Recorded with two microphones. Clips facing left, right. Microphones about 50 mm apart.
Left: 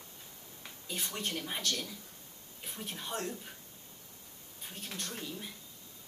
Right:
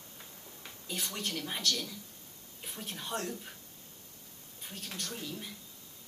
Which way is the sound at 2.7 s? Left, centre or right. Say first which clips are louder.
Right 1 dB; centre.